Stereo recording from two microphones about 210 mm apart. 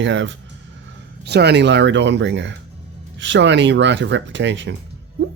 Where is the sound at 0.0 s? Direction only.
60° right (ahead or behind).